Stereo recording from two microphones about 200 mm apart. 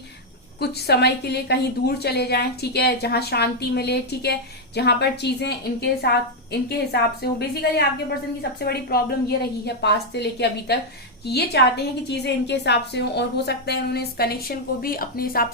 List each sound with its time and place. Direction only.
0.6 s a woman's voice: 55° left (ahead or behind)